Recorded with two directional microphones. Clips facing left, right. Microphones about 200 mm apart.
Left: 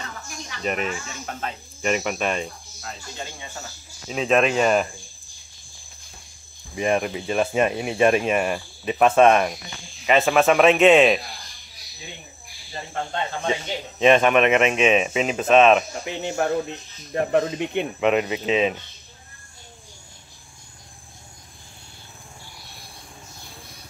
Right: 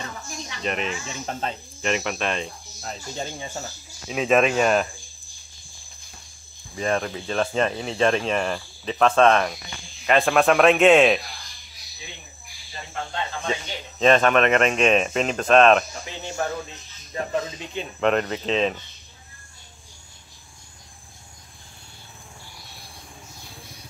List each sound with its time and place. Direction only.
0.6 s speech: 5° left (ahead or behind)
1.0 s speech: 30° right (ahead or behind)
1.8 s speech: 5° left (ahead or behind)
4.1 s speech: centre (ahead or behind)
6.7 s speech: 15° left (ahead or behind)
12.7 s speech: 35° left (ahead or behind)
13.5 s speech: 15° left (ahead or behind)
16.2 s speech: 15° left (ahead or behind)
17.1 s speech: 60° left (ahead or behind)
18.0 s speech: 5° left (ahead or behind)